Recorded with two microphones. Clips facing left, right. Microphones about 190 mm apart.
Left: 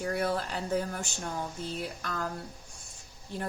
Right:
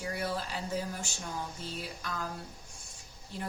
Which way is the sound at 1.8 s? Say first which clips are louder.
Left 3 dB; 55° left (ahead or behind).